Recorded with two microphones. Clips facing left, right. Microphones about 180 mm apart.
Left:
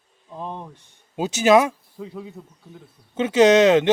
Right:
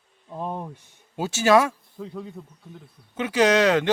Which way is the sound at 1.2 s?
20° left (ahead or behind).